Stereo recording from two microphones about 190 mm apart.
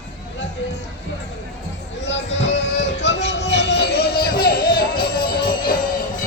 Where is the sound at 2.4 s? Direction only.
70° left (ahead or behind); by 5.8 s 50° left (ahead or behind).